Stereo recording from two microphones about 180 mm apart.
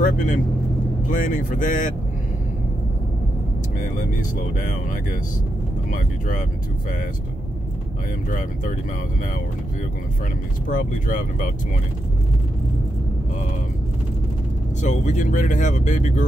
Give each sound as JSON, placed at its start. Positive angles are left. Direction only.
{"t": 0.0, "sound": "speech", "side_deg": 50}
{"t": 5.9, "sound": "speech", "side_deg": 50}
{"t": 8.3, "sound": "speech", "side_deg": 45}
{"t": 10.7, "sound": "speech", "side_deg": 45}
{"t": 14.8, "sound": "speech", "side_deg": 45}